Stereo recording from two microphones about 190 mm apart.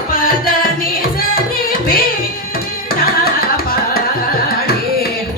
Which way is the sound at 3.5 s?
50° left (ahead or behind).